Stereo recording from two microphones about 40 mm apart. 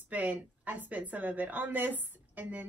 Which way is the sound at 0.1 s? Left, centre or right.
Right.